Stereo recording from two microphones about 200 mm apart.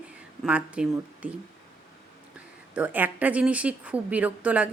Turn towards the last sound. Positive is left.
turn(degrees=-5)  # may be behind; listen again after turning